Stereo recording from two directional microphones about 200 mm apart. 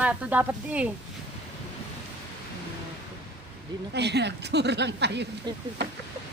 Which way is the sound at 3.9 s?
60° right (ahead or behind).